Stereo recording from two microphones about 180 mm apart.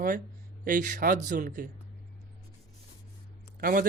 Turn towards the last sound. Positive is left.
turn(degrees=-50)  # may be behind; listen again after turning